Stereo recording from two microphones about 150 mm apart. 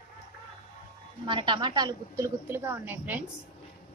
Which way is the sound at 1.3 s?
30° right (ahead or behind).